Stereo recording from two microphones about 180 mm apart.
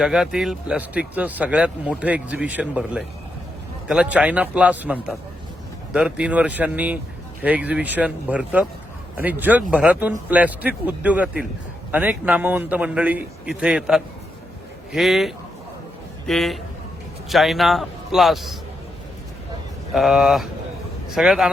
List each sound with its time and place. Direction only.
0.0 s a man's voice: 5° right (ahead or behind)
19.9 s a man's voice: centre (ahead or behind)